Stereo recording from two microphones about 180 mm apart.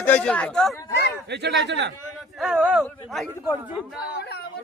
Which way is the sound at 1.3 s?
70° right (ahead or behind).